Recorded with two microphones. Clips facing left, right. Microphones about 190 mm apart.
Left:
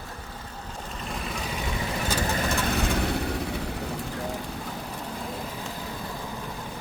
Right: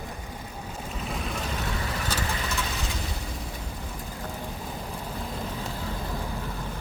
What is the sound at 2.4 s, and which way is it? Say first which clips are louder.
Vehicle: left 6 dB; 55° left (ahead or behind).